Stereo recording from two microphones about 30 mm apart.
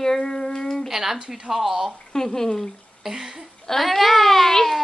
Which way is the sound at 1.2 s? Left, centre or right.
Right.